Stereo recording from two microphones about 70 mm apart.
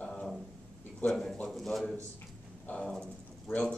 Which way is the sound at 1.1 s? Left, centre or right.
Centre.